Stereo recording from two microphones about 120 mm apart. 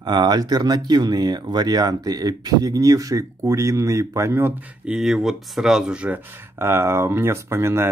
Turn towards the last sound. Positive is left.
turn(degrees=-20)  # may be behind; listen again after turning